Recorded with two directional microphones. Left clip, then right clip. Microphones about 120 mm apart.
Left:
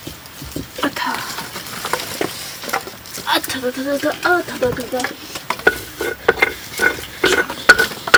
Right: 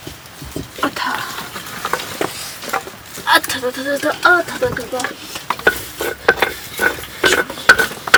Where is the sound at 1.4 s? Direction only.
20° left (ahead or behind).